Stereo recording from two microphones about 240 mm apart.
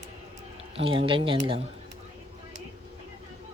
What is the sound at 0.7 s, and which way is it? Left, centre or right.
Speech, right.